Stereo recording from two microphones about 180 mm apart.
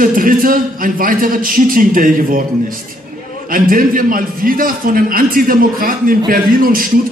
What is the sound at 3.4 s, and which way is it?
A man's voice, 50° right (ahead or behind).